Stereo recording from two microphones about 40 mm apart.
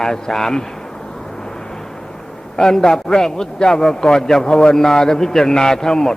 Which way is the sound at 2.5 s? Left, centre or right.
Centre.